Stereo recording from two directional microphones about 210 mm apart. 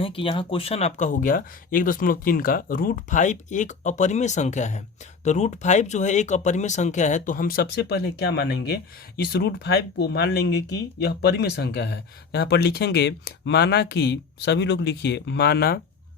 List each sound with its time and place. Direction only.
0.0 s speech: 25° left (ahead or behind); by 15.8 s 45° left (ahead or behind)